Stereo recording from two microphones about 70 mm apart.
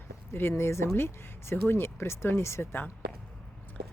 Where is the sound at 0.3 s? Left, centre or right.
Left.